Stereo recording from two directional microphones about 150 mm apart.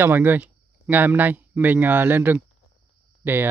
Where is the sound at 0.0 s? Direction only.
15° right (ahead or behind).